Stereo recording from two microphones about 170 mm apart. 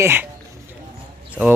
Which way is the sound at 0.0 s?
10° right (ahead or behind).